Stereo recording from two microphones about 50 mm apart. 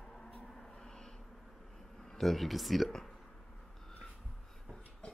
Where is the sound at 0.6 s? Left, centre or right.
Centre.